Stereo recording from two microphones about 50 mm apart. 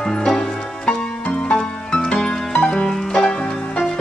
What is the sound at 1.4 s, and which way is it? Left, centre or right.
Music, centre.